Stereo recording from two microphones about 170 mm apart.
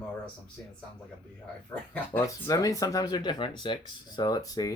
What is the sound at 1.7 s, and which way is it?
Speech, 10° left (ahead or behind).